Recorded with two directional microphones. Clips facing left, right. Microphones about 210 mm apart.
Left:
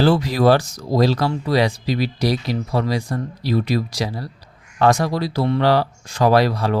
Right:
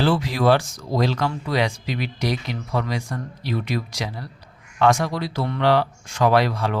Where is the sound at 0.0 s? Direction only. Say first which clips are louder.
Left 4 dB; 40° left (ahead or behind).